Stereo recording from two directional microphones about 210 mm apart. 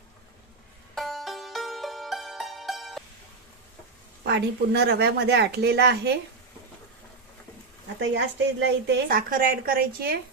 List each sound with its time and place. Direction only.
0.9 s music: centre (ahead or behind)
4.3 s a woman's voice: 50° right (ahead or behind)
7.9 s a woman's voice: 55° right (ahead or behind)